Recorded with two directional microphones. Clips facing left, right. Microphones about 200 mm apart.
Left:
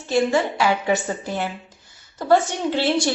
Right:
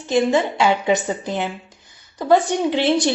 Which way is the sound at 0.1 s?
20° right (ahead or behind).